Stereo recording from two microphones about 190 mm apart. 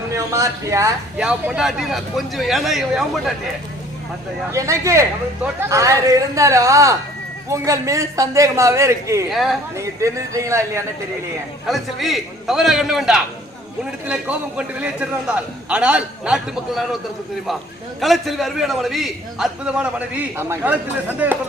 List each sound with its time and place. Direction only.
0.1 s speech: 15° right (ahead or behind)
1.2 s a man's voice: 5° right (ahead or behind)
4.5 s a man's voice: 15° right (ahead or behind)
9.3 s a man's voice: centre (ahead or behind)
9.7 s a man's voice: 15° right (ahead or behind)
11.6 s a man's voice: centre (ahead or behind)
18.0 s a man's voice: centre (ahead or behind)